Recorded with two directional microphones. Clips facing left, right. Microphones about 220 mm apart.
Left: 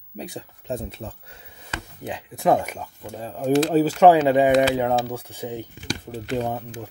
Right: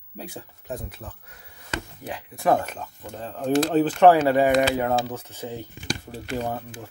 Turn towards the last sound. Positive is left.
turn(degrees=15)  # may be behind; listen again after turning